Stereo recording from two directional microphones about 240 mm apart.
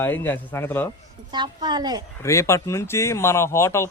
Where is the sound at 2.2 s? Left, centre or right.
Centre.